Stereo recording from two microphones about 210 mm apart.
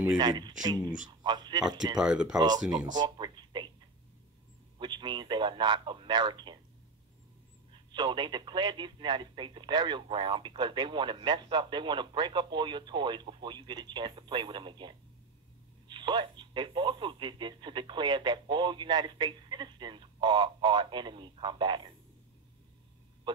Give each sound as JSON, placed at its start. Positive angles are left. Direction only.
{"t": 0.2, "sound": "speech", "side_deg": -20}
{"t": 2.0, "sound": "speech", "side_deg": -5}
{"t": 2.3, "sound": "speech", "side_deg": -20}
{"t": 3.0, "sound": "a sound", "side_deg": -20}
{"t": 4.7, "sound": "speech", "side_deg": -20}
{"t": 7.9, "sound": "speech", "side_deg": -20}